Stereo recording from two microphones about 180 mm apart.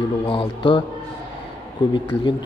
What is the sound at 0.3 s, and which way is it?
Speech, 30° left (ahead or behind).